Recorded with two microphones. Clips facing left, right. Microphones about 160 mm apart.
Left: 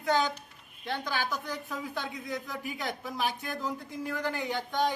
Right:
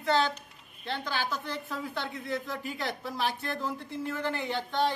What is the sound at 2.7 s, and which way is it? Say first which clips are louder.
Speech: even; centre (ahead or behind).